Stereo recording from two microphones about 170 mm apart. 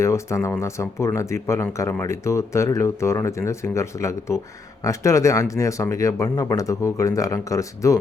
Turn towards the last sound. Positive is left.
turn(degrees=20)  # may be behind; listen again after turning